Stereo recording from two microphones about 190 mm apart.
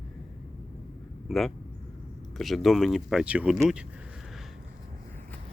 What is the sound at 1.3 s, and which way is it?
Speech, centre (ahead or behind).